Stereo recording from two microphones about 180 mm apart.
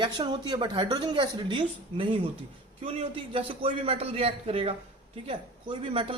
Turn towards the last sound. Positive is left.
turn(degrees=-30)  # may be behind; listen again after turning